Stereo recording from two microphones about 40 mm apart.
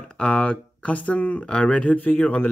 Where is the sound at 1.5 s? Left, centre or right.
Left.